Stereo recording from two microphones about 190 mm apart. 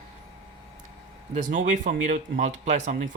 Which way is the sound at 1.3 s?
40° right (ahead or behind).